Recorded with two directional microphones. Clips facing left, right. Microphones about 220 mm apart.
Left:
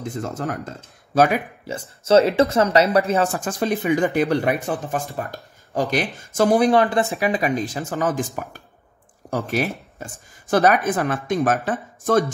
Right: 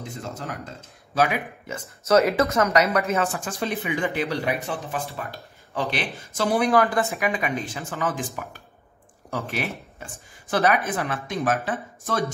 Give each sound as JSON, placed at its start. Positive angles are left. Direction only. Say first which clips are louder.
{"t": 1.1, "sound": "speech", "louder": "left 5 dB", "side_deg": 45}
{"t": 2.0, "sound": "speech", "louder": "left 4 dB", "side_deg": 30}
{"t": 6.7, "sound": "speech", "louder": "left 3 dB", "side_deg": 30}